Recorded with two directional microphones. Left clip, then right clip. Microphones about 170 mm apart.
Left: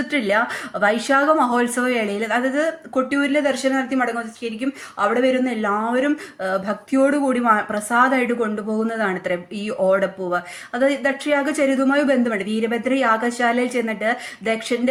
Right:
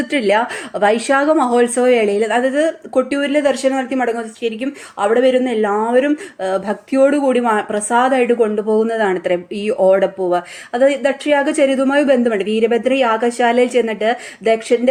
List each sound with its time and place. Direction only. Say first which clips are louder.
0.1 s speech: right 4 dB; 30° right (ahead or behind)